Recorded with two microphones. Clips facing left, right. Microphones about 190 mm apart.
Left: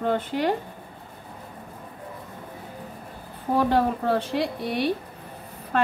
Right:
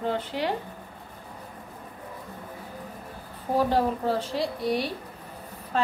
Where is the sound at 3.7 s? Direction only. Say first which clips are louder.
Left 2 dB; 60° left (ahead or behind).